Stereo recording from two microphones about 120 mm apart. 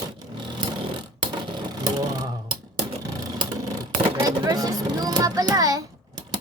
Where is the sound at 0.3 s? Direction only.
40° right (ahead or behind).